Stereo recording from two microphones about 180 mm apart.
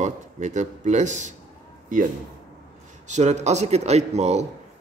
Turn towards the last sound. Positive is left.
turn(degrees=-40)  # may be behind; listen again after turning